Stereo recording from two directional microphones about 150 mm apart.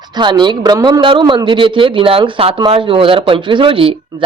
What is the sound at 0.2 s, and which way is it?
A man's voice, 30° right (ahead or behind).